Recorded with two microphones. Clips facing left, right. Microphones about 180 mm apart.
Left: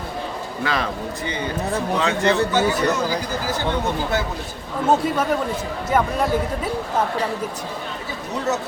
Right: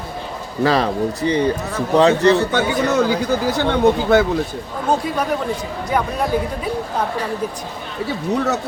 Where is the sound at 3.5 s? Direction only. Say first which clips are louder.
Right 7 dB; 65° right (ahead or behind).